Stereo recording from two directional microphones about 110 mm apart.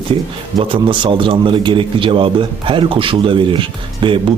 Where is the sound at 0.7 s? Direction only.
50° right (ahead or behind).